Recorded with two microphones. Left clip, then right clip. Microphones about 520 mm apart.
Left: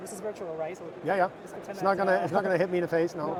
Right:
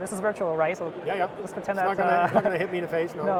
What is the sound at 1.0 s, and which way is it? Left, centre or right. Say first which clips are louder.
Speech: left 2 dB; left.